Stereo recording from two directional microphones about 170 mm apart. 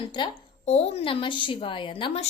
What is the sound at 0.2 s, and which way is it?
Speech, 25° left (ahead or behind).